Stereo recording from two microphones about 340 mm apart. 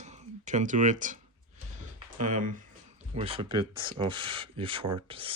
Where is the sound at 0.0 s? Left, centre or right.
Centre.